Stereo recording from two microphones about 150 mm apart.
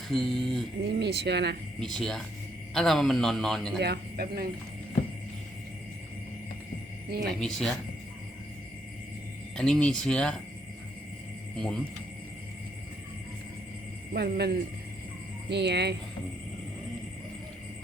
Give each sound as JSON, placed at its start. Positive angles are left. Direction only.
{"t": 0.1, "sound": "a man's voice", "side_deg": 0}
{"t": 0.9, "sound": "speech", "side_deg": -90}
{"t": 1.8, "sound": "a man's voice", "side_deg": 5}
{"t": 3.8, "sound": "speech", "side_deg": -90}
{"t": 7.3, "sound": "a man's voice", "side_deg": 5}
{"t": 9.6, "sound": "a man's voice", "side_deg": 5}
{"t": 11.5, "sound": "a man's voice", "side_deg": 5}
{"t": 14.1, "sound": "speech", "side_deg": -90}